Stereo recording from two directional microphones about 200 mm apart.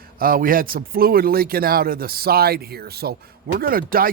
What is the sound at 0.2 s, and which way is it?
Speech, 45° right (ahead or behind).